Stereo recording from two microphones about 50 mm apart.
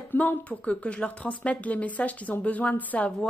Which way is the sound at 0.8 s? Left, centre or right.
Left.